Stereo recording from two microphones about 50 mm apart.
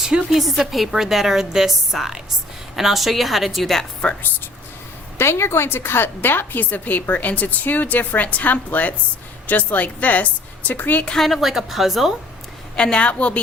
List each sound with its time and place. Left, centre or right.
0.3 s a woman's voice: centre
5.1 s a woman's voice: left
11.2 s a woman's voice: centre
12.7 s a woman's voice: centre